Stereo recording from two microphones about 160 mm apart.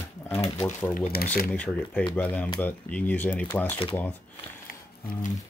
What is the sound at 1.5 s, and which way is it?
Speech, 10° left (ahead or behind).